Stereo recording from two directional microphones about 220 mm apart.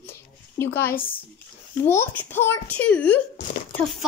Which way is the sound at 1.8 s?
10° left (ahead or behind).